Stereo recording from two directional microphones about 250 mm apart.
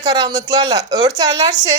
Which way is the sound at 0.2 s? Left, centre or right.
Centre.